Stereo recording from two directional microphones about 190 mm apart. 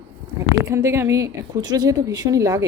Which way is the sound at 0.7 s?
15° right (ahead or behind).